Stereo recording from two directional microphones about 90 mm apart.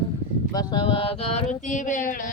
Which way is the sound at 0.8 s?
90° left.